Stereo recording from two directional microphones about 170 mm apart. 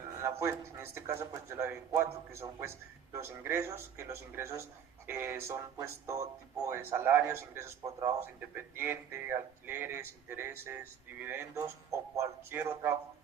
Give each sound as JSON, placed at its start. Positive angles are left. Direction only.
{"t": 0.2, "sound": "speech", "side_deg": -15}